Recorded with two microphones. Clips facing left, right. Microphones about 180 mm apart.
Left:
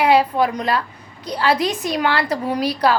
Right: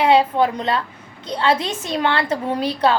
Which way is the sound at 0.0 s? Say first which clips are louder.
Even; 25° right (ahead or behind).